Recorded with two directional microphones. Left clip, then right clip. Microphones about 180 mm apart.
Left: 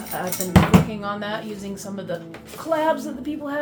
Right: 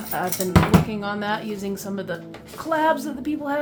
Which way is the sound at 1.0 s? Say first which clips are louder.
Right 2 dB; 35° right (ahead or behind).